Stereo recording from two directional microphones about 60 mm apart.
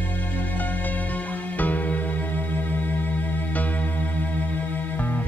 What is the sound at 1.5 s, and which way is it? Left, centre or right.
Music, left.